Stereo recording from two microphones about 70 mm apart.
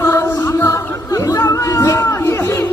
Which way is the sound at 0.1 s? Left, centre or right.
Left.